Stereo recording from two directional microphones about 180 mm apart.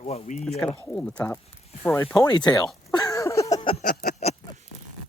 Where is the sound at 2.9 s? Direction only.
20° left (ahead or behind).